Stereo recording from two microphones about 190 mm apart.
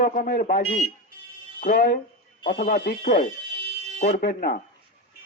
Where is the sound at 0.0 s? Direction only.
45° left (ahead or behind).